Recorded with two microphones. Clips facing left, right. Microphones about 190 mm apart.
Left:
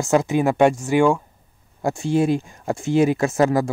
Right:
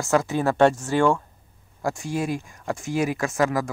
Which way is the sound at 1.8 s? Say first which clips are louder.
Left 7 dB; 25° left (ahead or behind).